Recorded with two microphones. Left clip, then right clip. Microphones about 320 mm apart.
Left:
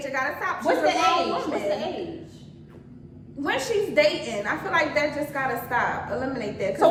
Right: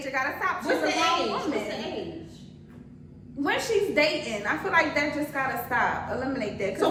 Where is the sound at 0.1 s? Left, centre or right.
Centre.